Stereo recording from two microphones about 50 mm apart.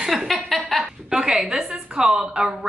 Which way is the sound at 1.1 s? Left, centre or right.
Centre.